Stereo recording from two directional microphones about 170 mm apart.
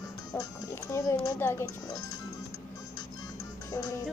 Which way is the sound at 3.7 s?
20° left (ahead or behind).